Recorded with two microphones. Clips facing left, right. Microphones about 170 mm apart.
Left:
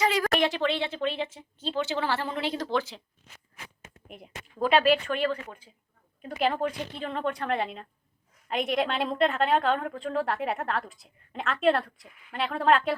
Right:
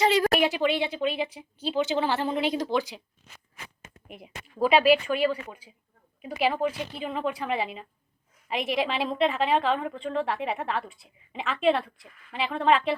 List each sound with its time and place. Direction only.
0.0 s a sound: 25° right (ahead or behind)
0.3 s speech: 10° right (ahead or behind)
4.1 s a woman's voice: 5° right (ahead or behind)